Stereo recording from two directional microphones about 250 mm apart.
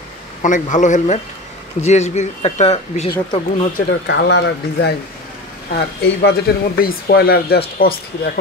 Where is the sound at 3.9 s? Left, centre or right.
Left.